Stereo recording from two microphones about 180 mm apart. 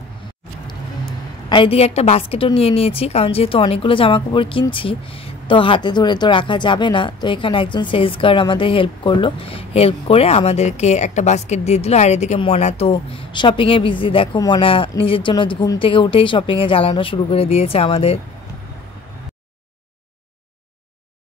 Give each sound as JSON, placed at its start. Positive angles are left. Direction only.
{"t": 1.5, "sound": "a woman's voice", "side_deg": 30}